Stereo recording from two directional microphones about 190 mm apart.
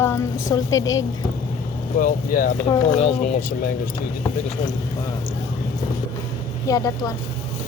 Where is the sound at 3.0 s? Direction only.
35° left (ahead or behind).